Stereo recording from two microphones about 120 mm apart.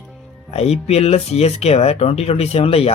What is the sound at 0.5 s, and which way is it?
Speech, 60° left (ahead or behind).